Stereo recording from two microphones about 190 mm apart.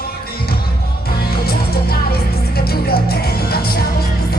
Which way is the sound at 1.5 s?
55° left (ahead or behind).